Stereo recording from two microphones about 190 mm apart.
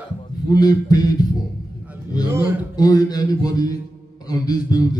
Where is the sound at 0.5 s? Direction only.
20° left (ahead or behind).